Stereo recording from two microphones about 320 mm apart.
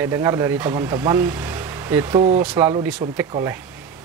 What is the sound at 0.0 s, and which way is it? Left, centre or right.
Speech, centre.